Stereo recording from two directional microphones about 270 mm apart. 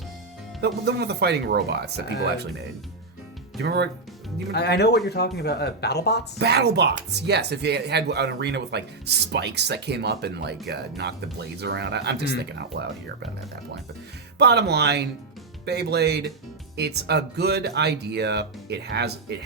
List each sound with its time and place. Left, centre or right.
0.6 s speech: right
3.6 s speech: right
4.5 s speech: left
6.4 s speech: right
14.3 s speech: right